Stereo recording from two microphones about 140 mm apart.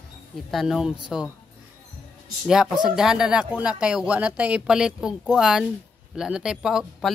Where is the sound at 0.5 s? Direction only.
Centre (ahead or behind).